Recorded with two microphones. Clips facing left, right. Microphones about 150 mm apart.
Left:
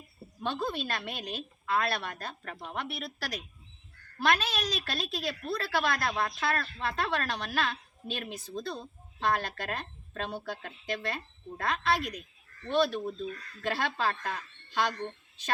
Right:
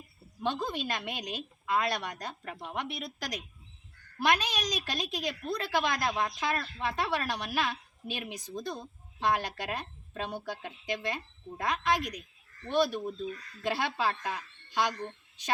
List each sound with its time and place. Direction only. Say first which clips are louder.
0.4 s a woman's voice: even; 15° right (ahead or behind)